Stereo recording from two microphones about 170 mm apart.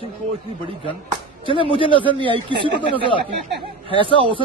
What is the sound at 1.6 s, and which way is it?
Speech, 30° left (ahead or behind).